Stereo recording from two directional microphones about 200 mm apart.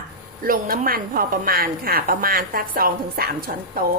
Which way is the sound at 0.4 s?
45° right (ahead or behind).